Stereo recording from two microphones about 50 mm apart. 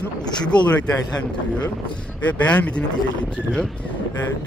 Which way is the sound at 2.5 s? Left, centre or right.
Left.